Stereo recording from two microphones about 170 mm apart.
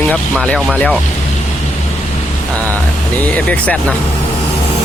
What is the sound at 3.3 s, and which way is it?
Speech, 10° left (ahead or behind).